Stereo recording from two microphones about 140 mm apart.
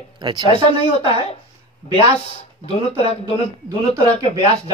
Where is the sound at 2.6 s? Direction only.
45° left (ahead or behind).